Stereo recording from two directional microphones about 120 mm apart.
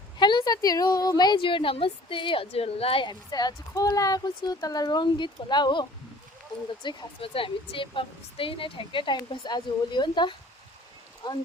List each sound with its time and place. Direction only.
0.2 s speech: 40° left (ahead or behind)
6.8 s speech: 45° left (ahead or behind)